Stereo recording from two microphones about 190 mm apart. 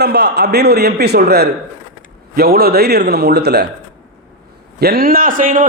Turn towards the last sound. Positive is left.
turn(degrees=-45)  # may be behind; listen again after turning